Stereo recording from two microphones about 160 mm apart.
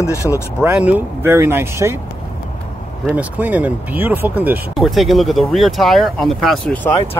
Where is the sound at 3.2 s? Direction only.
10° right (ahead or behind).